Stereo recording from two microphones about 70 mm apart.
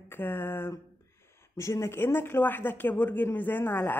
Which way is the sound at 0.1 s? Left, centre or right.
Left.